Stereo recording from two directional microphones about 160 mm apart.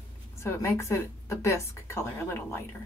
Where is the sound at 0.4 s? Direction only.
15° left (ahead or behind).